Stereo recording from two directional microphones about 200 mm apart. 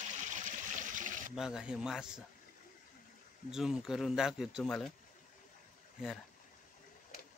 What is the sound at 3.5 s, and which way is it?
Speech, centre (ahead or behind).